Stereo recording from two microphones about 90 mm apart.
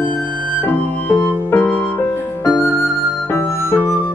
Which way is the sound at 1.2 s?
25° left (ahead or behind).